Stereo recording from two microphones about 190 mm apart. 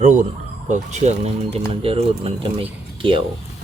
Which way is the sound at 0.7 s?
35° right (ahead or behind).